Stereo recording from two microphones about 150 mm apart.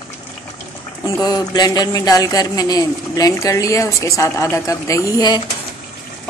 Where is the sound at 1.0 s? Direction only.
25° left (ahead or behind).